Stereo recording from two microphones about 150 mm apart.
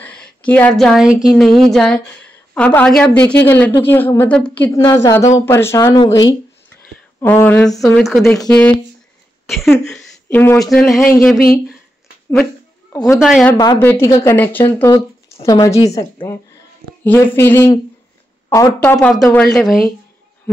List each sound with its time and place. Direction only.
0.0 s a woman's voice: 10° left (ahead or behind)
4.7 s a woman's voice: 20° left (ahead or behind)
6.7 s a sound: 15° left (ahead or behind)
7.8 s a woman's voice: 5° left (ahead or behind)
9.9 s a sound: 15° left (ahead or behind)
10.6 s speech: centre (ahead or behind)
13.2 s speech: centre (ahead or behind)
13.6 s a woman's voice: 20° left (ahead or behind)
17.0 s a woman's voice: 15° left (ahead or behind)
18.8 s a woman's voice: 10° left (ahead or behind)